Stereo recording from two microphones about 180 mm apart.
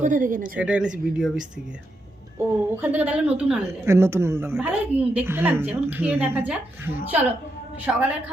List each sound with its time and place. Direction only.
0.0 s speech: 45° right (ahead or behind)
0.6 s a woman's voice: 5° right (ahead or behind)
2.4 s a woman's voice: 10° right (ahead or behind)